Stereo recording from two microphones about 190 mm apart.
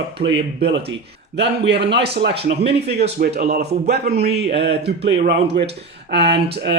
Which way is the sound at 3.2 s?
60° right (ahead or behind).